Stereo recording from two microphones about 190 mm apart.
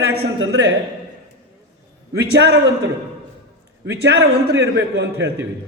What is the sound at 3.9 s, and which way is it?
A man's voice, 60° right (ahead or behind).